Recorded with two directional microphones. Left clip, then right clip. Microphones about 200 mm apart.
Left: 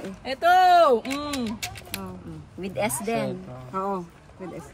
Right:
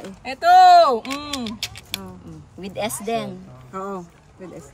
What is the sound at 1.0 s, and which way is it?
Speech, 5° right (ahead or behind).